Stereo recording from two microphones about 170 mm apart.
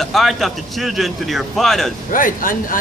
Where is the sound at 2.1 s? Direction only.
55° left (ahead or behind).